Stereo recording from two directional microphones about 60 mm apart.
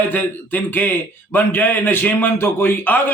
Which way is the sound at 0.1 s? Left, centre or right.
Left.